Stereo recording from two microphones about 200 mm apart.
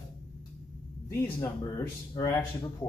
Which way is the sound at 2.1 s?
20° left (ahead or behind).